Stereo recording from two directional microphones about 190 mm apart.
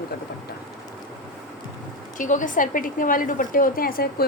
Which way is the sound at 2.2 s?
40° left (ahead or behind).